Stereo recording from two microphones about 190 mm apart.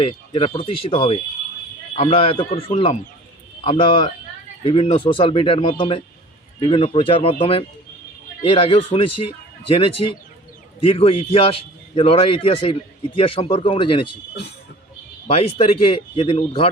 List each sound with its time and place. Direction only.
0.0 s a man's voice: 30° left (ahead or behind)
15.3 s speech: 30° left (ahead or behind)